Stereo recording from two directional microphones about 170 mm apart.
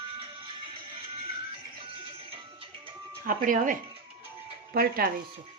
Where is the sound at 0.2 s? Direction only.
30° right (ahead or behind).